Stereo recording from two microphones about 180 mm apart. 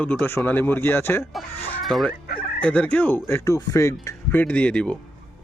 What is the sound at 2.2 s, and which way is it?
Fowl, 55° left (ahead or behind).